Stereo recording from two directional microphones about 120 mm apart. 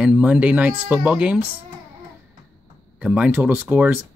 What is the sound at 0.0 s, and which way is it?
Speech, 10° right (ahead or behind).